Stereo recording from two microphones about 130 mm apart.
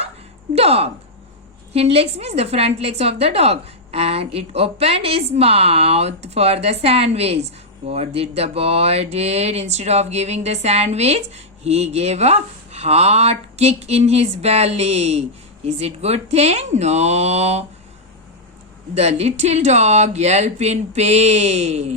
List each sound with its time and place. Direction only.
0.5 s a woman's voice: 50° right (ahead or behind)
18.9 s speech: 55° right (ahead or behind)